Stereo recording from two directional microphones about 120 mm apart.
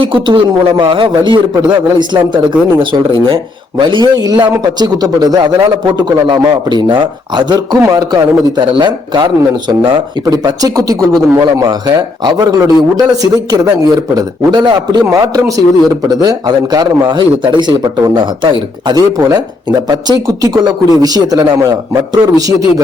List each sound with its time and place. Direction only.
0.0 s a man's voice: 45° right (ahead or behind)